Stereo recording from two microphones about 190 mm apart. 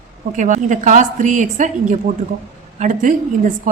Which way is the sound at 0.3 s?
40° right (ahead or behind).